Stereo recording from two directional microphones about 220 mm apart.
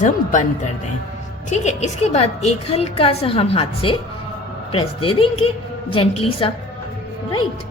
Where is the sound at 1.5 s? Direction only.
30° left (ahead or behind).